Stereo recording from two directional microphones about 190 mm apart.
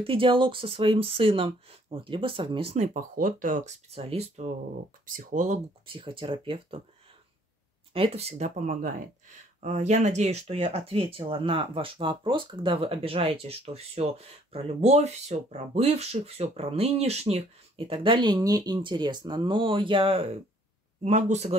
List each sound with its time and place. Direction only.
0.0 s speech: 30° right (ahead or behind)
5.0 s speech: 45° right (ahead or behind)
5.9 s speech: 25° right (ahead or behind)
7.9 s speech: 30° right (ahead or behind)